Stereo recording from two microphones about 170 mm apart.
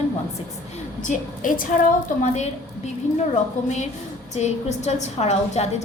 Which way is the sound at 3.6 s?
45° left (ahead or behind).